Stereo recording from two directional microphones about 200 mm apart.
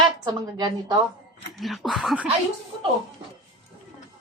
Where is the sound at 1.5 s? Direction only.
Centre (ahead or behind).